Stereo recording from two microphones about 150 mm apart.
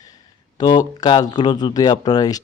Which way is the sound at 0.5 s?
25° left (ahead or behind).